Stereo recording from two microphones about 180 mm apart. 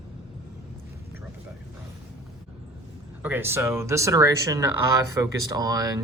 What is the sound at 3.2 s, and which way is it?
Speech, 10° right (ahead or behind).